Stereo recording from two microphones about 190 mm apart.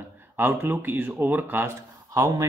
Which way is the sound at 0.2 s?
10° right (ahead or behind).